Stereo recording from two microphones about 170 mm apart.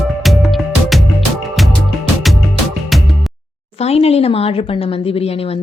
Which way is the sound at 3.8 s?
35° left (ahead or behind).